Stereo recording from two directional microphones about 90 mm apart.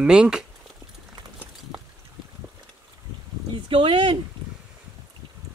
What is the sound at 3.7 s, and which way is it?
Speech, 70° right (ahead or behind).